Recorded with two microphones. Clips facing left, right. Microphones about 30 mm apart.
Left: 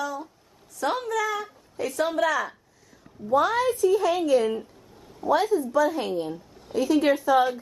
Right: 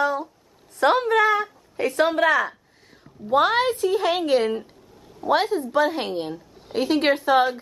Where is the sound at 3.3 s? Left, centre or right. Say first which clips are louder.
Right 3 dB; right.